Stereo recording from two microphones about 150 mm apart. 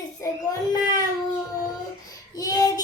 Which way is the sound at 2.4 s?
25° left (ahead or behind).